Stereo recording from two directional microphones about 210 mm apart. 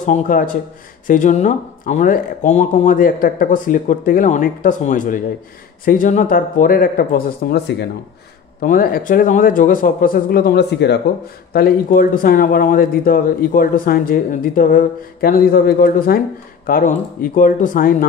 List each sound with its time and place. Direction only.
0.0 s speech: 40° left (ahead or behind)
8.5 s speech: 40° left (ahead or behind)
11.5 s speech: 45° left (ahead or behind)